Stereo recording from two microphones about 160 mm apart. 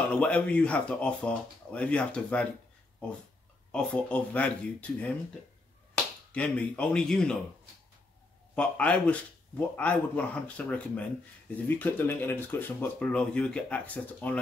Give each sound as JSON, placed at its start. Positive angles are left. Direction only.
{"t": 0.1, "sound": "speech", "side_deg": 5}
{"t": 3.7, "sound": "speech", "side_deg": 10}
{"t": 6.3, "sound": "speech", "side_deg": 10}
{"t": 8.5, "sound": "speech", "side_deg": 5}